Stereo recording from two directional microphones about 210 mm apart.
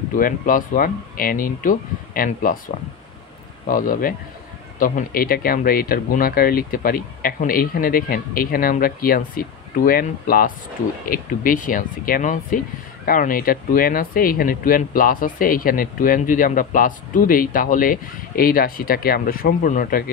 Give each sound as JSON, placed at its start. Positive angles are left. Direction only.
{"t": 0.1, "sound": "speech", "side_deg": 40}
{"t": 3.6, "sound": "speech", "side_deg": 40}